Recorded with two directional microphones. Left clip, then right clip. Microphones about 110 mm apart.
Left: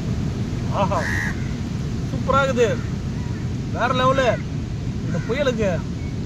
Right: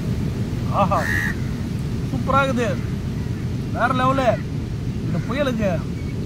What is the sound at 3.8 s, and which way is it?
Speech, 50° left (ahead or behind).